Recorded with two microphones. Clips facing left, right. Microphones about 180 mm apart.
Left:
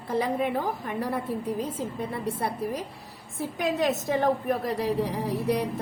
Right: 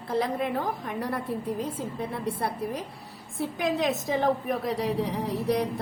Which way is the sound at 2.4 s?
10° left (ahead or behind).